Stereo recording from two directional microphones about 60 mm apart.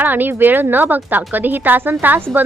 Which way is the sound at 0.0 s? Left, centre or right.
Right.